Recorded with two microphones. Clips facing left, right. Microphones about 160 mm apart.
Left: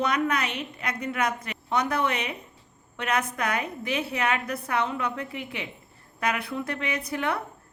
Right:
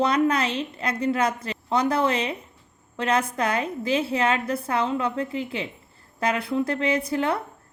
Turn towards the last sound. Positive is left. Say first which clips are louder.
# right 5 dB
turn(degrees=-25)  # may be behind; listen again after turning